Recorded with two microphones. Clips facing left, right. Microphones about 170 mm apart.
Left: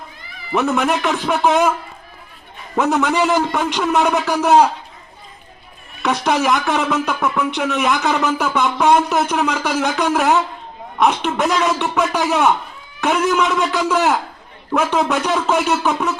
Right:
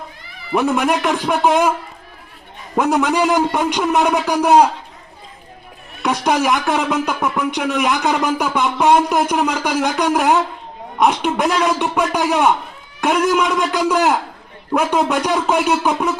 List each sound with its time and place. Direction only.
0.5 s speech: 10° right (ahead or behind)
2.7 s speech: 10° right (ahead or behind)
6.0 s a man's voice: 10° right (ahead or behind)